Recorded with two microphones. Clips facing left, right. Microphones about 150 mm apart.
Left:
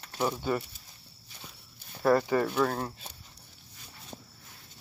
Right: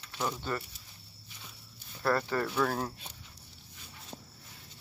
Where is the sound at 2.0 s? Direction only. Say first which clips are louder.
Left 5 dB; 15° left (ahead or behind).